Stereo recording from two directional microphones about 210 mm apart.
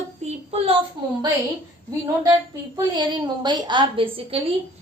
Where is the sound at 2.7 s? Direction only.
20° right (ahead or behind).